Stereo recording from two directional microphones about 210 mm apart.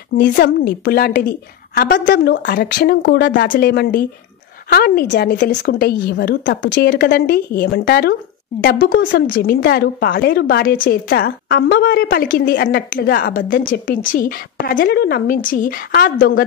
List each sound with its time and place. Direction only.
0.2 s a woman's voice: 45° left (ahead or behind)
3.4 s a woman's voice: 45° left (ahead or behind)